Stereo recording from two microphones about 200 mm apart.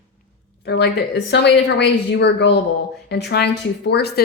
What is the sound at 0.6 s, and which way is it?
A woman's voice, 55° left (ahead or behind).